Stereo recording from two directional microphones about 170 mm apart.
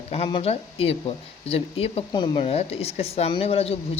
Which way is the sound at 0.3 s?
30° left (ahead or behind).